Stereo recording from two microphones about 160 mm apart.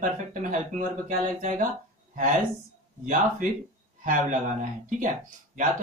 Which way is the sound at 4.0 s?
55° right (ahead or behind).